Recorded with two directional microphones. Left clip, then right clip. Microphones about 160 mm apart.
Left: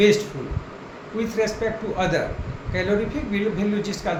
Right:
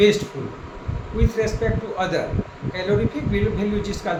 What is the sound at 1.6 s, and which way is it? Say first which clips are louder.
A man's voice: even; 5° left (ahead or behind).